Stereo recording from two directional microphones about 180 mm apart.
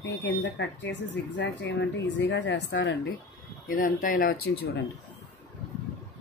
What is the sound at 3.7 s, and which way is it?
Speech, 50° left (ahead or behind).